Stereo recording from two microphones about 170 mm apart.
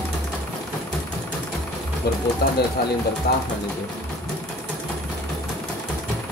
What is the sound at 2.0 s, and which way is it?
Speech, 70° left (ahead or behind).